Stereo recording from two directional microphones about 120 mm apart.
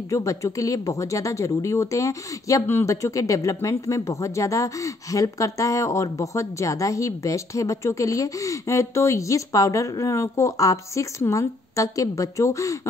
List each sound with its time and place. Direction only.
0.1 s speech: 25° left (ahead or behind)